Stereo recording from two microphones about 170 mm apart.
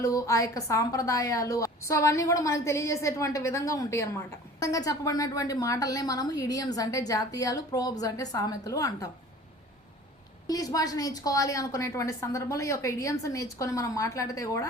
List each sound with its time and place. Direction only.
0.0 s a woman's voice: 20° left (ahead or behind)
10.4 s a woman's voice: 20° left (ahead or behind)